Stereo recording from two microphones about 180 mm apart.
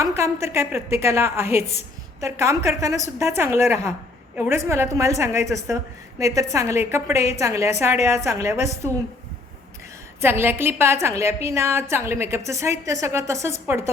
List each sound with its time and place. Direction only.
0.0 s a woman's voice: 15° right (ahead or behind)
10.2 s a woman's voice: 15° right (ahead or behind)